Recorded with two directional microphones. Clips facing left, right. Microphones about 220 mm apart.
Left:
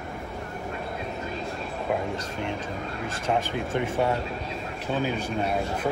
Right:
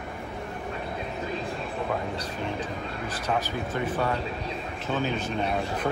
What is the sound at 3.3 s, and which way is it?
Speech, 25° left (ahead or behind).